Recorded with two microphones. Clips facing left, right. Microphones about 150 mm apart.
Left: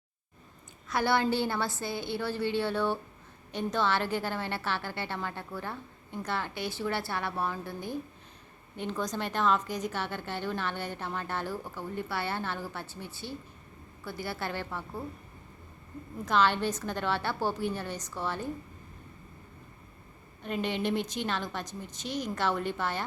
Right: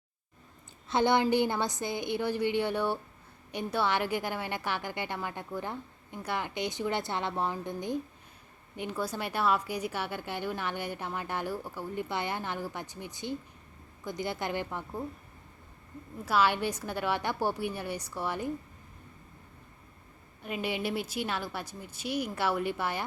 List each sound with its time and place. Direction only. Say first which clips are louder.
0.9 s a woman's voice: right 2 dB; 20° right (ahead or behind)
16.2 s a woman's voice: left 1 dB; 10° right (ahead or behind)
20.4 s a woman's voice: left 2 dB; 10° right (ahead or behind)